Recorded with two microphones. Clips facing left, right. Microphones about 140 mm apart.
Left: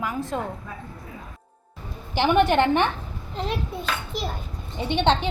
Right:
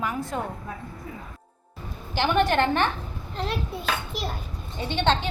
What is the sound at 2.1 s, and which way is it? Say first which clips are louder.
Speech: left 3 dB; 20° left (ahead or behind).